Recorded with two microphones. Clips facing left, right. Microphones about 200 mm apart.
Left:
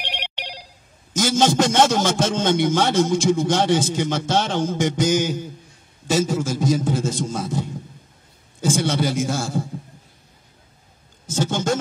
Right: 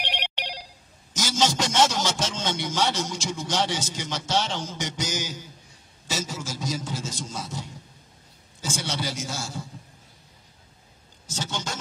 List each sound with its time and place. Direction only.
1.1 s a man's voice: 55° left (ahead or behind)
11.2 s a man's voice: 50° left (ahead or behind)